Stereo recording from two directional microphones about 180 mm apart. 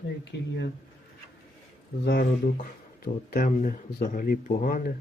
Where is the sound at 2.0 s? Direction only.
55° left (ahead or behind).